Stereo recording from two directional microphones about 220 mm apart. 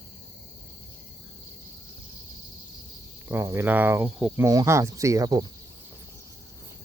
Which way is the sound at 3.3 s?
10° right (ahead or behind).